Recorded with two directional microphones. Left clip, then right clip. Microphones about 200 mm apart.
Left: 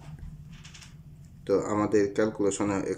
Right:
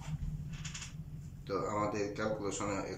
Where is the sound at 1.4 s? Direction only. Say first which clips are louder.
Left 9 dB; 40° left (ahead or behind).